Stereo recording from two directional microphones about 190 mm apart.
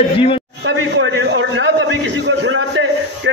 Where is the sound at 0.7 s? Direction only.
70° right (ahead or behind).